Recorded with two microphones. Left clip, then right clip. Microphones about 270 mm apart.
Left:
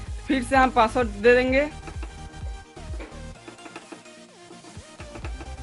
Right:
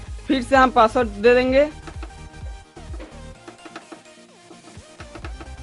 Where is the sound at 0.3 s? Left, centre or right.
Right.